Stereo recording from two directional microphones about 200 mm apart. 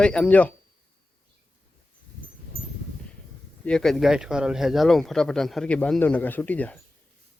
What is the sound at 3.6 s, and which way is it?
Speech, centre (ahead or behind).